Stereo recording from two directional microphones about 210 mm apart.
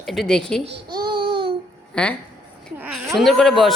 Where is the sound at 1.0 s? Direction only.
20° right (ahead or behind).